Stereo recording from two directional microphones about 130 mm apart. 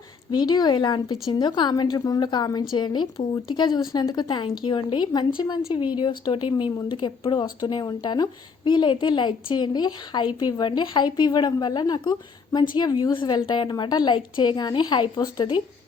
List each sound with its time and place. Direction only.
0.3 s a woman's voice: 30° left (ahead or behind)